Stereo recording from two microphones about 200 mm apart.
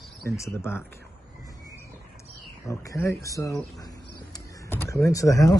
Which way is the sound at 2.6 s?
15° left (ahead or behind).